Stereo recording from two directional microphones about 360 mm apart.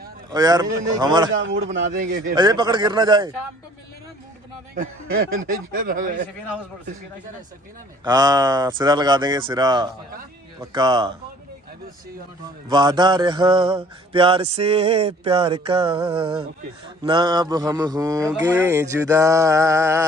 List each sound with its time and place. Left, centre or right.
0.3 s speech: centre
1.7 s speech: right
5.7 s speech: right
8.0 s speech: centre
12.6 s speech: centre